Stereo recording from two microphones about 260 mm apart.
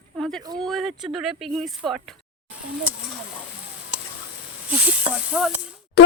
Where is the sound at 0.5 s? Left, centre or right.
Centre.